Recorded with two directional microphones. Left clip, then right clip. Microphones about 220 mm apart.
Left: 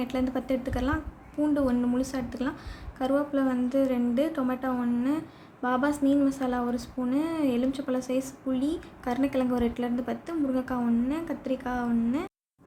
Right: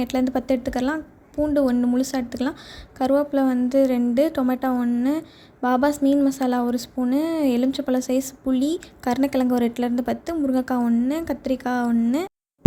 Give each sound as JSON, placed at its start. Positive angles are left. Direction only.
{"t": 0.0, "sound": "speech", "side_deg": -35}